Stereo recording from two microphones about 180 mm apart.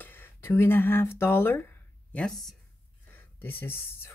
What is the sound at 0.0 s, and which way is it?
Speech, 10° left (ahead or behind).